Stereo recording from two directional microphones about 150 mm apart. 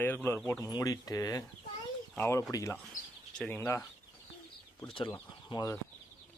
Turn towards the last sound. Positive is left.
turn(degrees=25)  # may be behind; listen again after turning